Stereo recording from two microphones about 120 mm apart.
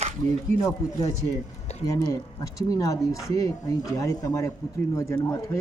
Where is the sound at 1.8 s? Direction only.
25° left (ahead or behind).